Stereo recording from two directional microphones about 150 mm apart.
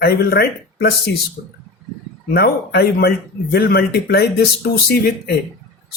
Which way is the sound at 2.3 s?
90° left.